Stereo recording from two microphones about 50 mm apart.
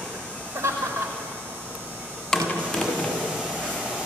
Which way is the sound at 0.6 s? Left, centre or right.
Right.